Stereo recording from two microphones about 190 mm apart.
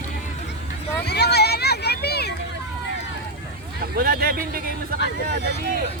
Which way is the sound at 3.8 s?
50° right (ahead or behind).